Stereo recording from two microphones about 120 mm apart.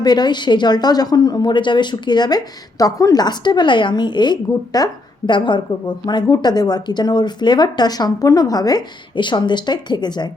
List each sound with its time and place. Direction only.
0.0 s a woman's voice: 35° left (ahead or behind)